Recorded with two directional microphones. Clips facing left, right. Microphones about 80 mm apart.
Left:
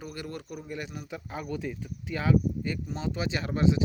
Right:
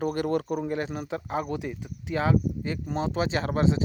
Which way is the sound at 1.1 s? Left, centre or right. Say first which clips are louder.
Right 9 dB; right.